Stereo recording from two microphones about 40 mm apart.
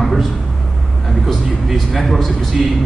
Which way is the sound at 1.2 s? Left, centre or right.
Centre.